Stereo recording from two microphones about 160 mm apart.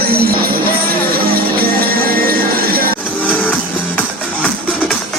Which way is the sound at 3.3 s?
10° left (ahead or behind).